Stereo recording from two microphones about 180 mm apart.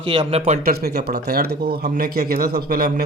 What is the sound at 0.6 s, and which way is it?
A man's voice, 60° right (ahead or behind).